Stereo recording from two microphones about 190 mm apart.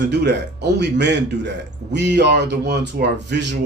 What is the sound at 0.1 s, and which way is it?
Speech, 65° right (ahead or behind).